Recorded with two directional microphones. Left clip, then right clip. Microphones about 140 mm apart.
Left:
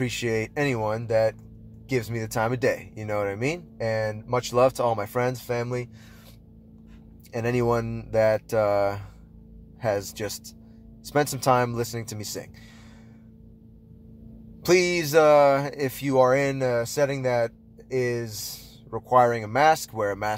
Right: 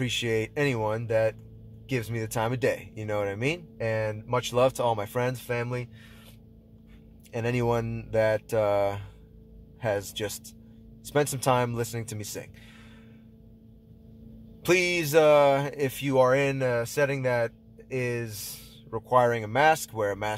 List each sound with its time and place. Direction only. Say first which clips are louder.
0.0 s speech: left 1 dB; 10° right (ahead or behind)
7.3 s speech: left 3 dB; 10° right (ahead or behind)
14.6 s speech: left 3 dB; 10° right (ahead or behind)